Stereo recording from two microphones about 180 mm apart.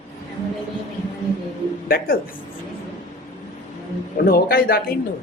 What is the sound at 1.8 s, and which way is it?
Speech, 55° left (ahead or behind).